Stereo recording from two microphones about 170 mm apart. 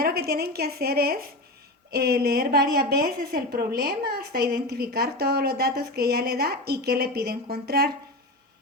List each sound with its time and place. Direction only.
0.0 s a woman's voice: 65° right (ahead or behind)